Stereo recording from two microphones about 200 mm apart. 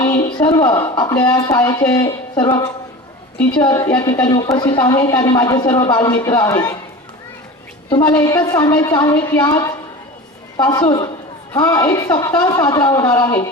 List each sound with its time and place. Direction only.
0.4 s a man's voice: 20° left (ahead or behind)
8.1 s a man's voice: 15° left (ahead or behind)